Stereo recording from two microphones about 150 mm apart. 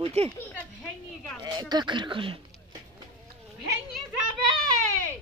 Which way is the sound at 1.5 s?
30° right (ahead or behind).